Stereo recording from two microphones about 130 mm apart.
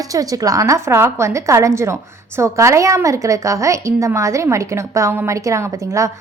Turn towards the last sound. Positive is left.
turn(degrees=-25)  # may be behind; listen again after turning